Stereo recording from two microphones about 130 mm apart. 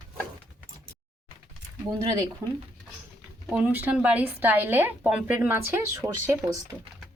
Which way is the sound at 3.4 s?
10° right (ahead or behind).